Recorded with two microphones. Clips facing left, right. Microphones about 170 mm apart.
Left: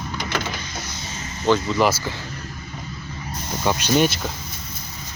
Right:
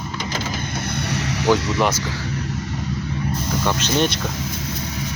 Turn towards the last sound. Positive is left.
turn(degrees=10)  # may be behind; listen again after turning